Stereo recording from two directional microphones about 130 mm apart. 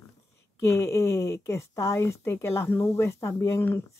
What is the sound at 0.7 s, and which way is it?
Speech, 20° left (ahead or behind).